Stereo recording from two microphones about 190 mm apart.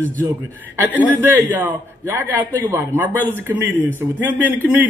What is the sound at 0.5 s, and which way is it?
A man's voice, 10° right (ahead or behind).